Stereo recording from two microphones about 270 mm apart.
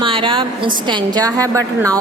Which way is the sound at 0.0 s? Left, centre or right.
Centre.